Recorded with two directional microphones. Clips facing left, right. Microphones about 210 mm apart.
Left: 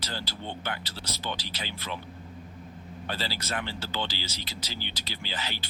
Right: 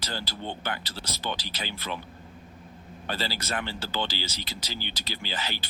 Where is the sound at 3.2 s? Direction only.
45° right (ahead or behind).